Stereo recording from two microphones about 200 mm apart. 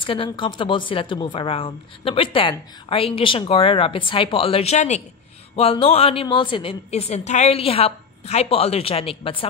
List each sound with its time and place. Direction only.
0.0 s speech: 25° left (ahead or behind)